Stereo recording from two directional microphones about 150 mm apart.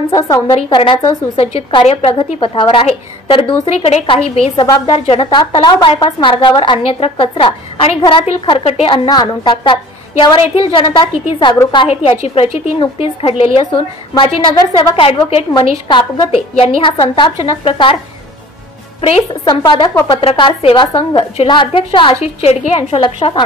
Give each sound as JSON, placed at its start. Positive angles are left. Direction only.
{"t": 0.1, "sound": "a woman's voice", "side_deg": 25}
{"t": 1.0, "sound": "a woman's voice", "side_deg": 35}
{"t": 18.9, "sound": "a woman's voice", "side_deg": 40}
{"t": 19.6, "sound": "a woman's voice", "side_deg": 30}
{"t": 22.2, "sound": "a woman's voice", "side_deg": 45}